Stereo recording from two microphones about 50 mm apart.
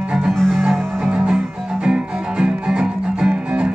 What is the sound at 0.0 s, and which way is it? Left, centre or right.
Music, centre.